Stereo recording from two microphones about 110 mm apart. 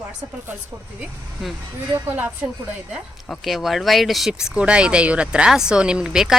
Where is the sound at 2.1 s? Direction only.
15° right (ahead or behind).